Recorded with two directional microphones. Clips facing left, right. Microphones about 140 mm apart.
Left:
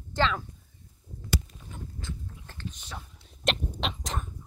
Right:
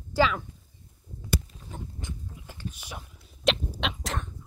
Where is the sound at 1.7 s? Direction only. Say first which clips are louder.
Right 3 dB; 40° right (ahead or behind).